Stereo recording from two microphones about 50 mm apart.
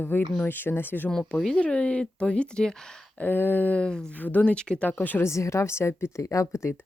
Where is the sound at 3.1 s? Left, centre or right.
Left.